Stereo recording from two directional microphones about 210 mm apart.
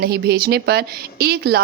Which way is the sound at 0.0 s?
45° right (ahead or behind).